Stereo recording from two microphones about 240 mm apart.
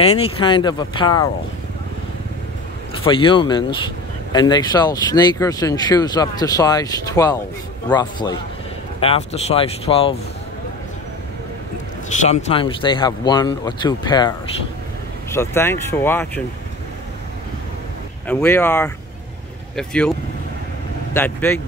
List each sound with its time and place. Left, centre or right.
0.2 s speech: centre
3.1 s speech: left
12.2 s speech: left
15.3 s speech: centre
18.2 s speech: centre
21.1 s speech: centre